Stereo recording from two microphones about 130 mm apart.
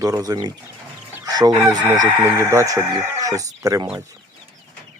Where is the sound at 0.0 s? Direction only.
25° right (ahead or behind).